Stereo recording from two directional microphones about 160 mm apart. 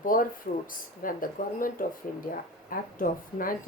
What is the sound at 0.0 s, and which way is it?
Speech, 60° left (ahead or behind).